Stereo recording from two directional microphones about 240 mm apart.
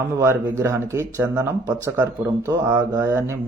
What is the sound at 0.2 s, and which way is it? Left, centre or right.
Speech, centre.